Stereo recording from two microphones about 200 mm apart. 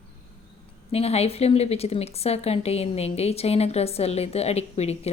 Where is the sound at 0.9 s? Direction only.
30° left (ahead or behind).